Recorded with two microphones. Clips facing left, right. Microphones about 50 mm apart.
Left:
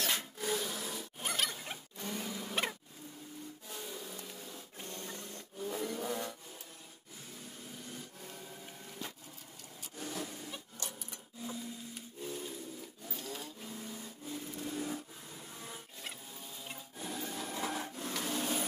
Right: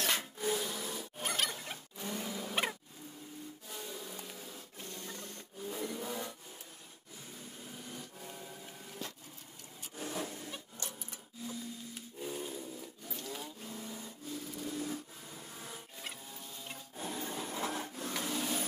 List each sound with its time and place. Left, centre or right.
0.0 s wood: centre
3.6 s a sound: centre
4.9 s wood: centre
7.9 s printer: centre
9.9 s vehicle: centre
10.2 s wood: centre
12.2 s a sound: centre
13.1 s wood: centre
14.3 s vehicle: centre
15.3 s printer: centre
17.0 s rub: centre
17.5 s wood: centre